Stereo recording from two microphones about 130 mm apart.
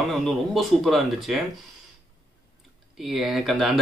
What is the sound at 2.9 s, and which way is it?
Speech, centre (ahead or behind).